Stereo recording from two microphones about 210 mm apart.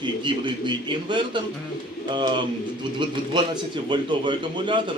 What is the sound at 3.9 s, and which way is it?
Speech, 20° right (ahead or behind).